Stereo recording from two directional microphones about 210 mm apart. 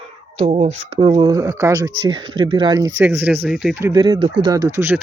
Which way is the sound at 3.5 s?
5° right (ahead or behind).